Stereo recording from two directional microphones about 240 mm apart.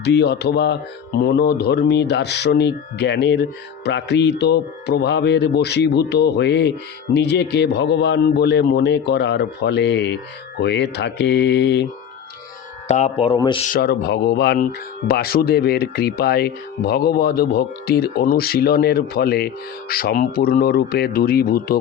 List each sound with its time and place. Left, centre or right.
0.0 s speech: left
12.9 s speech: left
13.7 s speech: left